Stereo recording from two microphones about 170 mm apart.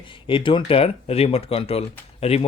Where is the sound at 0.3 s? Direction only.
30° left (ahead or behind).